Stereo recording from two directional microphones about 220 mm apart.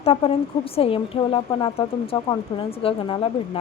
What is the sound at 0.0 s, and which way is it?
A woman's voice, 25° left (ahead or behind).